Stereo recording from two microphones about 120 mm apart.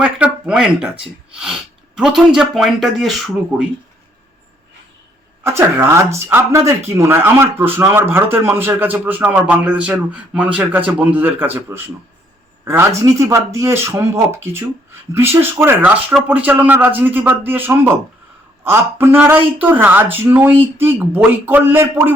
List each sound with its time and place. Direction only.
0.0 s a sound: 10° right (ahead or behind)
2.0 s speech: 5° right (ahead or behind)
5.4 s speech: 20° right (ahead or behind)